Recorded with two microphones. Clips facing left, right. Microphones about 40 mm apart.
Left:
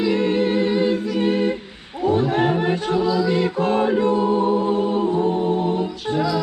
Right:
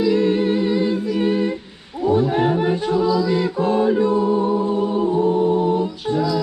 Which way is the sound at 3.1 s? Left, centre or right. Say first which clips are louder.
Right 1 dB; left.